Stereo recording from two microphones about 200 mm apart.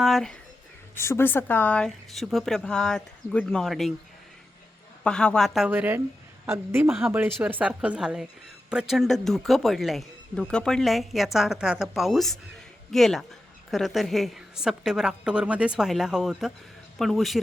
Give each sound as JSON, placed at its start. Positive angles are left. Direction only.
{"t": 0.0, "sound": "speech", "side_deg": 0}
{"t": 0.9, "sound": "speech", "side_deg": 10}
{"t": 5.0, "sound": "speech", "side_deg": 5}